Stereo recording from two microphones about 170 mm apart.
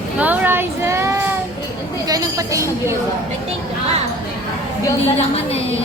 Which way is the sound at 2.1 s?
20° right (ahead or behind).